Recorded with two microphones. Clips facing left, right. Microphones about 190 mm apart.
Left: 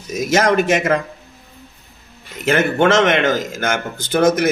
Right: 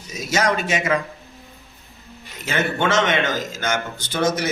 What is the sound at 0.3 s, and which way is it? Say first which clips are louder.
Speech: left 6 dB; 50° left (ahead or behind).